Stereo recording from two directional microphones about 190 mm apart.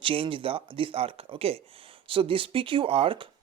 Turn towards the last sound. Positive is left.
turn(degrees=-30)  # may be behind; listen again after turning